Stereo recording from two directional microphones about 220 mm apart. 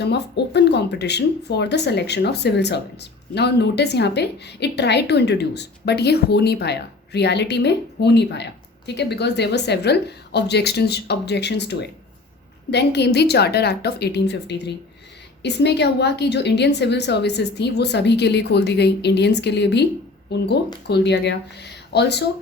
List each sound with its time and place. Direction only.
0.0 s speech: 50° left (ahead or behind)